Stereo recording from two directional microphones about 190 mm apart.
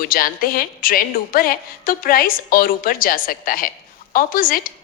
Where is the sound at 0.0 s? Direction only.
50° left (ahead or behind).